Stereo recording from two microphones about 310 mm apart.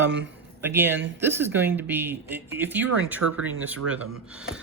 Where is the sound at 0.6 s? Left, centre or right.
Centre.